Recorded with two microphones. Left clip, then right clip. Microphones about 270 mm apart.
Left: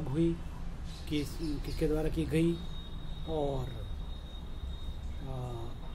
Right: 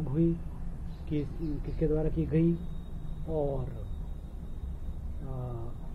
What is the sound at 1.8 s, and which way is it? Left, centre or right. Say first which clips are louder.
Speech: right 2 dB; left.